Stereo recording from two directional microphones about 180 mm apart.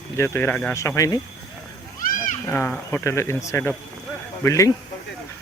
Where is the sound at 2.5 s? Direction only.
15° left (ahead or behind).